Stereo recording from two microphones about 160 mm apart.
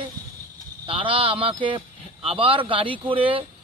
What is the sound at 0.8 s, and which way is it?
Speech, 35° right (ahead or behind).